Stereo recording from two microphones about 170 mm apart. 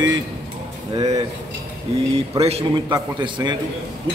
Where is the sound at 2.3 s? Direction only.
35° right (ahead or behind).